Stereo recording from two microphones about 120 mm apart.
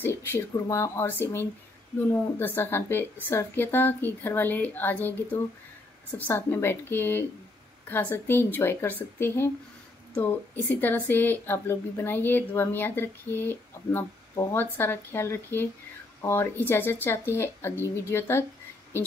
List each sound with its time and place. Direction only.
0.0 s speech: 20° left (ahead or behind)